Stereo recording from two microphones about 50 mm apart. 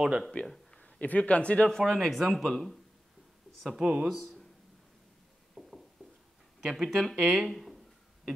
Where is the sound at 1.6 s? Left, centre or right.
Centre.